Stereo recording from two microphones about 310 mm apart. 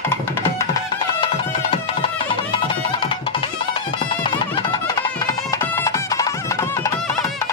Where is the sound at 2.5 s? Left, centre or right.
Centre.